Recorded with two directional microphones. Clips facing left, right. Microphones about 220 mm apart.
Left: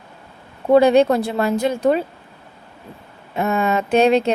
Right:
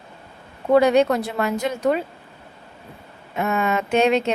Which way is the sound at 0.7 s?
30° left (ahead or behind).